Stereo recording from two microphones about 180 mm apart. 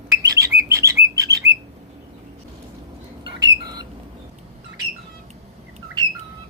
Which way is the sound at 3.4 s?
20° right (ahead or behind).